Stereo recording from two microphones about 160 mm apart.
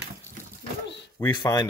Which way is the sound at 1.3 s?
25° left (ahead or behind).